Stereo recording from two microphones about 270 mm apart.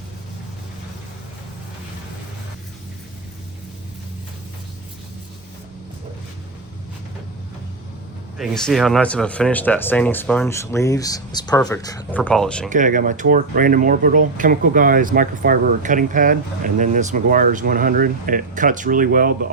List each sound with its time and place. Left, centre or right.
8.4 s speech: centre
12.7 s speech: right